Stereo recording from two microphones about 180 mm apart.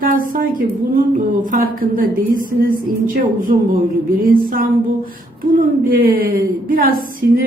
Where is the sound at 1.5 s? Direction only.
50° right (ahead or behind).